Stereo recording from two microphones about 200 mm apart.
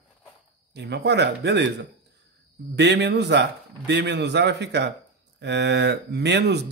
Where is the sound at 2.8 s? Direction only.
60° right (ahead or behind).